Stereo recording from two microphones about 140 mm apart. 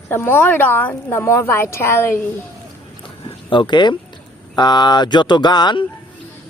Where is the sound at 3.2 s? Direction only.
35° left (ahead or behind).